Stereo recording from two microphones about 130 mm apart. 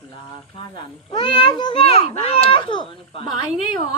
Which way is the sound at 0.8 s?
40° left (ahead or behind).